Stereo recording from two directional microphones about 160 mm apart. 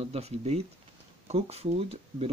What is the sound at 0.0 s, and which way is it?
Speech, 40° right (ahead or behind).